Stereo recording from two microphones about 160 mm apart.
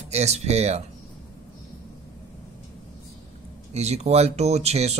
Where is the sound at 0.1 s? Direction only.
40° right (ahead or behind).